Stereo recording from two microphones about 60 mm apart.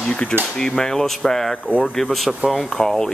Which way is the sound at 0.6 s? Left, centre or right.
Centre.